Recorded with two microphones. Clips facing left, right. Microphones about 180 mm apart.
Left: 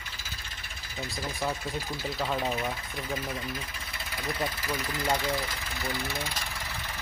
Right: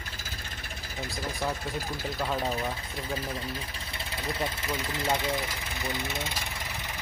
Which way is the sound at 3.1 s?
30° right (ahead or behind).